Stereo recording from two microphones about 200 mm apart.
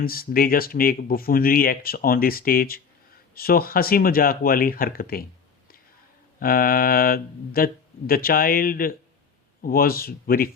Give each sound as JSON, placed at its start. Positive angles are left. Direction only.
{"t": 0.0, "sound": "speech", "side_deg": 45}
{"t": 6.4, "sound": "speech", "side_deg": 45}